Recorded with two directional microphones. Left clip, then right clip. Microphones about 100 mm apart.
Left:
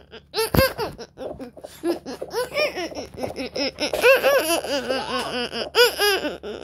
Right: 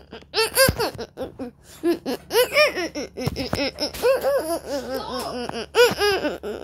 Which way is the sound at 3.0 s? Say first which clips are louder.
Right 3 dB; 40° right (ahead or behind).